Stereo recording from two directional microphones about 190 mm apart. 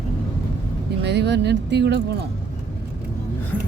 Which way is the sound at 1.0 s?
60° right (ahead or behind).